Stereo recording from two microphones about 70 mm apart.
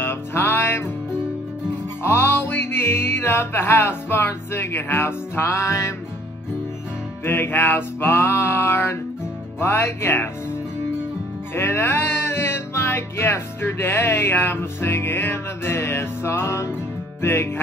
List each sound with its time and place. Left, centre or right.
0.0 s music: left
2.0 s music: left
7.2 s music: left